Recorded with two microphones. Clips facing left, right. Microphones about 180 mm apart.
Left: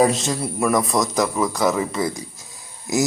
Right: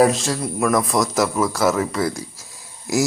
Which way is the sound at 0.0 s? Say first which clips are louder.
Right 1 dB; centre (ahead or behind).